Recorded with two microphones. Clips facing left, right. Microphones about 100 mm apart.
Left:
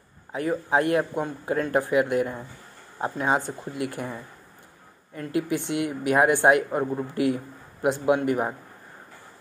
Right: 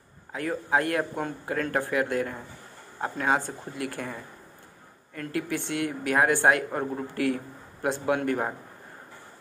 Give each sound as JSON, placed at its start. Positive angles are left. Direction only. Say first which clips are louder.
{"t": 0.3, "sound": "a man's voice", "louder": "left 2 dB", "side_deg": 25}